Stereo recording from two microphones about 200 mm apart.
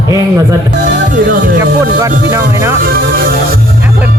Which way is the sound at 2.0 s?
15° right (ahead or behind).